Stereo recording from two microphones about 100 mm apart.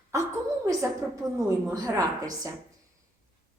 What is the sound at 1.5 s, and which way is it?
A woman's voice, 35° right (ahead or behind).